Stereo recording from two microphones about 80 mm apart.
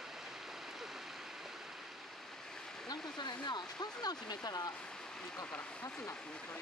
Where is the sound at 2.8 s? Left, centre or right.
Left.